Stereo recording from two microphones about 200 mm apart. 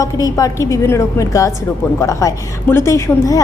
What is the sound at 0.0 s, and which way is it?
A woman's voice, 15° left (ahead or behind).